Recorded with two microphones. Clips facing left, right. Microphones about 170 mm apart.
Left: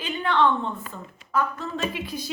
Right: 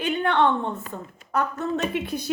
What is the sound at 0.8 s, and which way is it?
Speech, 45° right (ahead or behind).